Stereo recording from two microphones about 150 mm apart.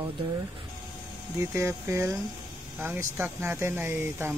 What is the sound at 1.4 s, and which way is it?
Speech, 20° right (ahead or behind).